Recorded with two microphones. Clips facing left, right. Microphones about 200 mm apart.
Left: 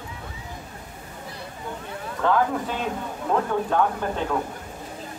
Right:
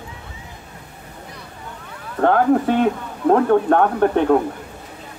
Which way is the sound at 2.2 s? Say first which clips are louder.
Right 7 dB; 60° right (ahead or behind).